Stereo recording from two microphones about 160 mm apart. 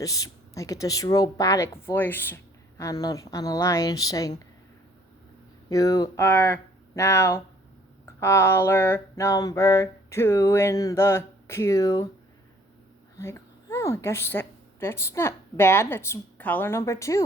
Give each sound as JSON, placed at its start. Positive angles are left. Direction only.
{"t": 0.0, "sound": "speech", "side_deg": 20}
{"t": 5.6, "sound": "mantra", "side_deg": 20}
{"t": 13.1, "sound": "speech", "side_deg": 20}